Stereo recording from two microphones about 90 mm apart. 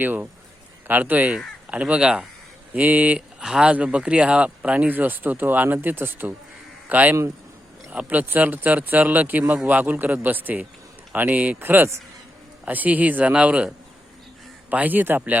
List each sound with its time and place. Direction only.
0.0 s speech: 20° right (ahead or behind)